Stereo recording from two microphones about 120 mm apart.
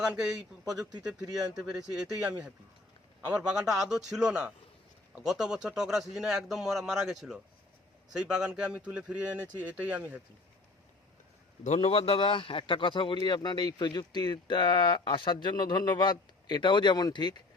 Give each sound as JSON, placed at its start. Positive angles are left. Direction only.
{"t": 0.0, "sound": "speech", "side_deg": -5}
{"t": 1.5, "sound": "a man's voice", "side_deg": -10}
{"t": 11.6, "sound": "a man's voice", "side_deg": 65}